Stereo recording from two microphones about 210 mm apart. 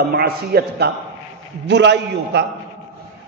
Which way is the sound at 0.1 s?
50° right (ahead or behind).